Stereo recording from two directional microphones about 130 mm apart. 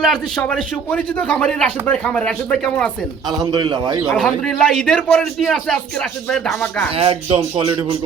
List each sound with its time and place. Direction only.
0.0 s a man's voice: 5° left (ahead or behind)
3.4 s a man's voice: 35° right (ahead or behind)
4.1 s a man's voice: 5° left (ahead or behind)
6.9 s speech: 50° right (ahead or behind)